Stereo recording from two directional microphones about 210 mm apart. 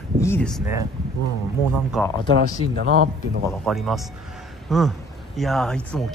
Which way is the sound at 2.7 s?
55° right (ahead or behind).